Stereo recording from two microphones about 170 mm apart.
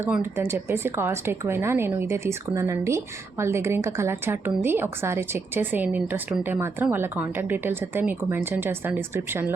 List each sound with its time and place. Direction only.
0.0 s a woman's voice: 15° right (ahead or behind)